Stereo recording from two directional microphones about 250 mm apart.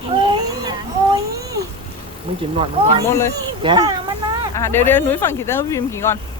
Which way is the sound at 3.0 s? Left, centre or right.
Centre.